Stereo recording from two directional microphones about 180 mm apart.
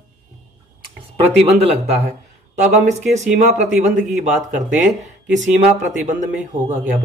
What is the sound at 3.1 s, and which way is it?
Speech, 40° right (ahead or behind).